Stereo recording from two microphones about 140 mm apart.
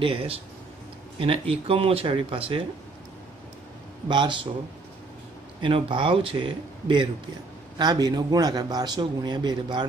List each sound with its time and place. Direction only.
0.0 s speech: 40° right (ahead or behind)
4.1 s speech: 35° right (ahead or behind)
5.6 s a man's voice: 40° right (ahead or behind)